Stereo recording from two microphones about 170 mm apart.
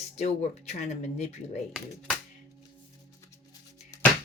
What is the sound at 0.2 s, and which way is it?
Speech, 40° left (ahead or behind).